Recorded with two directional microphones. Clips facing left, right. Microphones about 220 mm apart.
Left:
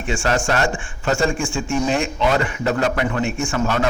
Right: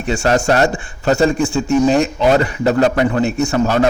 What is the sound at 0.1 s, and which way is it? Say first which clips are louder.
A man's voice: right 6 dB; 40° right (ahead or behind).